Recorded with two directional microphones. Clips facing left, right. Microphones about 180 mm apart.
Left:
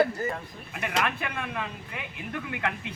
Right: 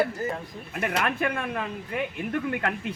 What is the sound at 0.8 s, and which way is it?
Speech, 50° right (ahead or behind).